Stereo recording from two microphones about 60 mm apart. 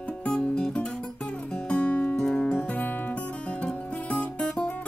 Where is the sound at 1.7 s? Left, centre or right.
Left.